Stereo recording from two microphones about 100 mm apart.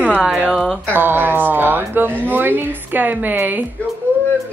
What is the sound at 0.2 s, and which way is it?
A woman's voice, 10° right (ahead or behind).